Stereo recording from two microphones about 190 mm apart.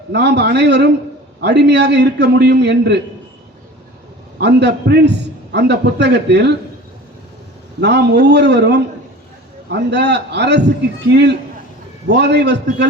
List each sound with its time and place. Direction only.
0.1 s a man's voice: 65° right (ahead or behind)
4.4 s a man's voice: 60° right (ahead or behind)
7.8 s a man's voice: 60° right (ahead or behind)